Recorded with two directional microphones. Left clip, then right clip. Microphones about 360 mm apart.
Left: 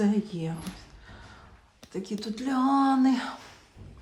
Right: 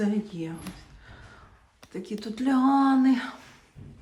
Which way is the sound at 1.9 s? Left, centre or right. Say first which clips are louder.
Left 1 dB; centre.